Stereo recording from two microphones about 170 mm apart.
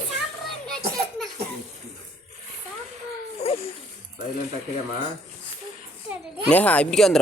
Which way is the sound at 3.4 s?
35° left (ahead or behind).